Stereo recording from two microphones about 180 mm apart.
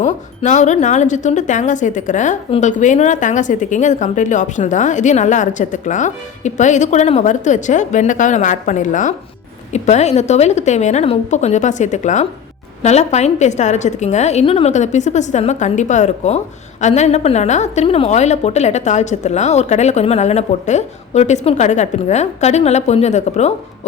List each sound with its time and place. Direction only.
0.0 s a woman's voice: 40° left (ahead or behind)